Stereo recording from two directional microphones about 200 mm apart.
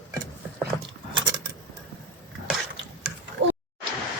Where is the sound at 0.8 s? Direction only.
25° right (ahead or behind).